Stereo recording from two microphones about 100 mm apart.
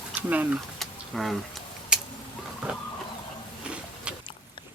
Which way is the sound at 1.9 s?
10° right (ahead or behind).